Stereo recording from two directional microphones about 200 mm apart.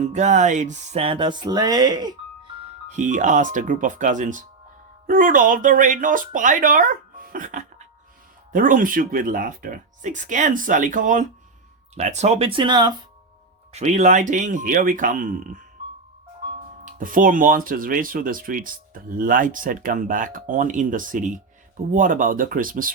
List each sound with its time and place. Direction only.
0.0 s music: 35° right (ahead or behind); by 2.1 s 20° right (ahead or behind)
2.9 s speech: 40° right (ahead or behind)
11.9 s music: 35° right (ahead or behind)
13.7 s speech: 35° right (ahead or behind)
16.8 s speech: 45° right (ahead or behind)